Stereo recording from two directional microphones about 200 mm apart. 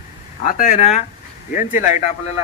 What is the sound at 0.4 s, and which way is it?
Speech, 40° left (ahead or behind).